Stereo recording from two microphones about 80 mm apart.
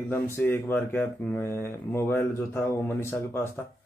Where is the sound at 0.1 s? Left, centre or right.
Left.